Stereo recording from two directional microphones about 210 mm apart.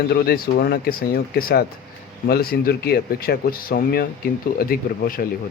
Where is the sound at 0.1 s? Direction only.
45° left (ahead or behind).